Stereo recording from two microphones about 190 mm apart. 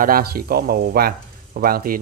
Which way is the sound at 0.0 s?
50° right (ahead or behind).